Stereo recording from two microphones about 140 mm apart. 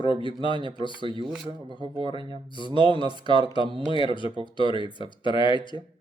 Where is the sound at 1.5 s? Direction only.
35° right (ahead or behind).